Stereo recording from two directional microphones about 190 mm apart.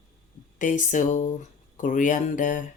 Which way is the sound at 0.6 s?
45° left (ahead or behind).